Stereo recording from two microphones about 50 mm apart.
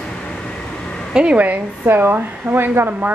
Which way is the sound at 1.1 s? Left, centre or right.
Right.